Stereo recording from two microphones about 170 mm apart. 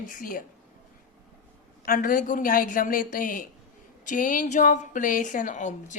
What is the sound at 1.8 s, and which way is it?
A woman's voice, 55° left (ahead or behind).